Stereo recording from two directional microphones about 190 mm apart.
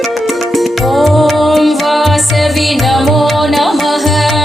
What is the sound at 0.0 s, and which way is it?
Music, centre (ahead or behind).